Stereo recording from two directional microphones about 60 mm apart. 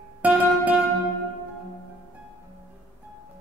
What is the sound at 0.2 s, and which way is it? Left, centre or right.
Music, right.